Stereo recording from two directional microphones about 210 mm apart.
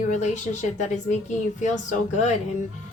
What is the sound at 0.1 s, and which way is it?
Speech, 35° left (ahead or behind).